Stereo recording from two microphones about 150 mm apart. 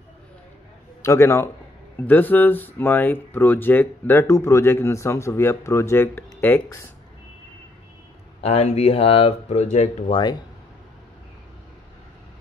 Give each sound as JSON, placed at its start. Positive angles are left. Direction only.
{"t": 1.0, "sound": "speech", "side_deg": 20}
{"t": 8.4, "sound": "speech", "side_deg": 45}